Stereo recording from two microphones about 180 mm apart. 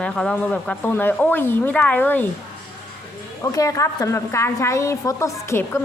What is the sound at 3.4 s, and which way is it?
A woman's voice, 20° left (ahead or behind).